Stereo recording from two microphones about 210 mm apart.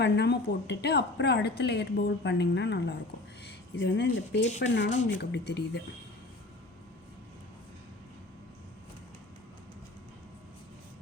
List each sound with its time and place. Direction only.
0.0 s speech: 55° left (ahead or behind)